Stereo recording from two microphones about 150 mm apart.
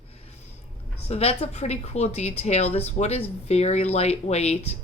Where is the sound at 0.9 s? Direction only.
40° left (ahead or behind).